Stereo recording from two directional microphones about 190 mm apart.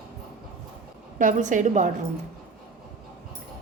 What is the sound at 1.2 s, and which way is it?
Speech, 40° right (ahead or behind).